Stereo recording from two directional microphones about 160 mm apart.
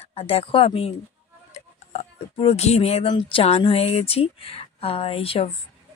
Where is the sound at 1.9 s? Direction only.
40° left (ahead or behind).